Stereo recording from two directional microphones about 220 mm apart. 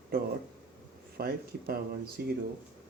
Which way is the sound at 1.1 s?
45° right (ahead or behind).